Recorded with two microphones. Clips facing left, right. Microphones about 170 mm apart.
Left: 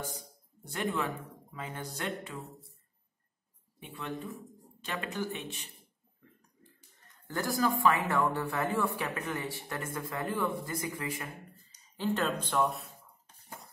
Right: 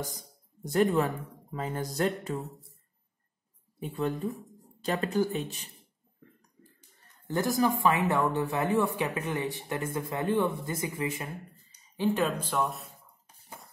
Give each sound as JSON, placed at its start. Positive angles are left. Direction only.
{"t": 0.7, "sound": "speech", "side_deg": -40}
{"t": 3.8, "sound": "speech", "side_deg": -40}
{"t": 7.3, "sound": "speech", "side_deg": -20}